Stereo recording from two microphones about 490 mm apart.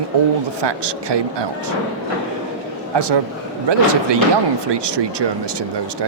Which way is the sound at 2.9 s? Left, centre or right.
Right.